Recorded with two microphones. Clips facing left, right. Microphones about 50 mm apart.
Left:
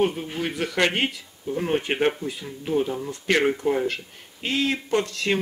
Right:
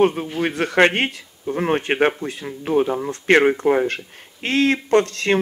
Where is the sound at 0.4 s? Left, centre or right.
Right.